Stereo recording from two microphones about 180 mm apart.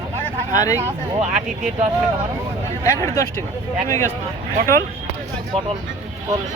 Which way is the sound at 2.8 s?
15° left (ahead or behind).